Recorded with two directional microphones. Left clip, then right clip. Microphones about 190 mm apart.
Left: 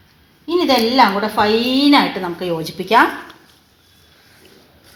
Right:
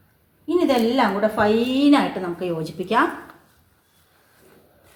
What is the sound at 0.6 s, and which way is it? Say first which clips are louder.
A woman's voice: left 6 dB; 25° left (ahead or behind).